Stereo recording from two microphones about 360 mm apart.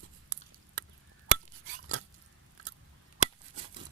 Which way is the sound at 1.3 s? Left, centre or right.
Right.